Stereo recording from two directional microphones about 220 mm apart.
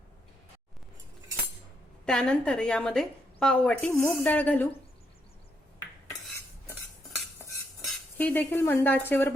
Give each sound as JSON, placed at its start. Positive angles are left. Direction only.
{"t": 2.0, "sound": "a woman's voice", "side_deg": 5}
{"t": 8.2, "sound": "speech", "side_deg": 10}